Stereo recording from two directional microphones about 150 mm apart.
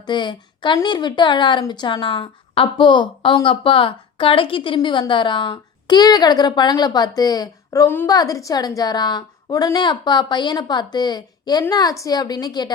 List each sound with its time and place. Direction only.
0.0 s a woman's voice: 30° left (ahead or behind)